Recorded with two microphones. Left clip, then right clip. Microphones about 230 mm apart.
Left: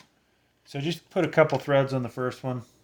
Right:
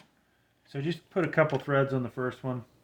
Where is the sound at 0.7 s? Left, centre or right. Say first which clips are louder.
Left 3 dB; left.